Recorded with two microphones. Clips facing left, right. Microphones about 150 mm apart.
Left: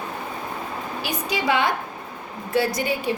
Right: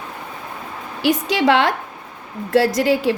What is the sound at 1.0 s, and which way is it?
A woman's voice, 90° right.